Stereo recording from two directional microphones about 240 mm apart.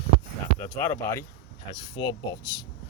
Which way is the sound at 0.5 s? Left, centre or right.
Centre.